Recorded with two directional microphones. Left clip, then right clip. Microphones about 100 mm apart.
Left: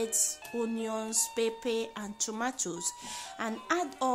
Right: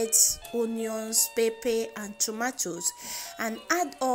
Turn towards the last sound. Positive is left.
turn(degrees=-15)  # may be behind; listen again after turning